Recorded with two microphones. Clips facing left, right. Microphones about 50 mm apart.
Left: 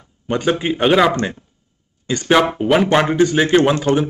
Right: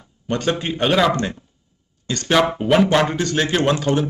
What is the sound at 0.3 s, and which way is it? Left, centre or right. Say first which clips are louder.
Speech: left 3 dB; centre.